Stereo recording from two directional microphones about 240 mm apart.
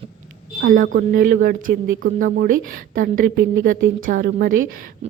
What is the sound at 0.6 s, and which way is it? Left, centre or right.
A woman's voice, right.